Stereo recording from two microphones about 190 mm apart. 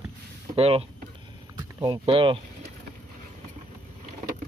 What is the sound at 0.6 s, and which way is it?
Speech, 30° right (ahead or behind).